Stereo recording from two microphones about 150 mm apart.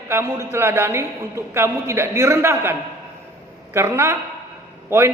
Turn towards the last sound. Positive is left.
turn(degrees=-15)  # may be behind; listen again after turning